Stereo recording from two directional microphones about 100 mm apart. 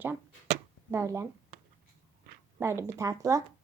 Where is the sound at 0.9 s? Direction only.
30° right (ahead or behind).